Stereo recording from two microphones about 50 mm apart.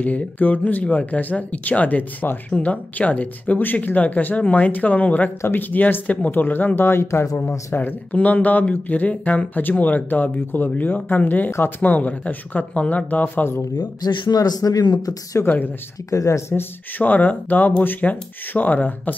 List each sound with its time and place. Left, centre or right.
0.0 s speech: left
8.1 s speech: left
13.4 s speech: left
14.6 s speech: left
15.4 s speech: left
16.2 s speech: left
17.0 s speech: left